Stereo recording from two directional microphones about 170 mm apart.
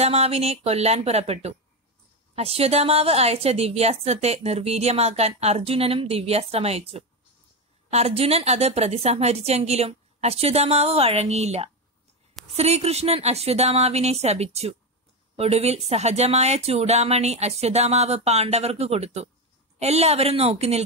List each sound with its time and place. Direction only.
0.0 s a woman's voice: 35° right (ahead or behind)